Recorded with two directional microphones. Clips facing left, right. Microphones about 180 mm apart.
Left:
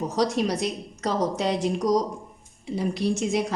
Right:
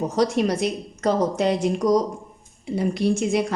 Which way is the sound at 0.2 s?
55° right (ahead or behind).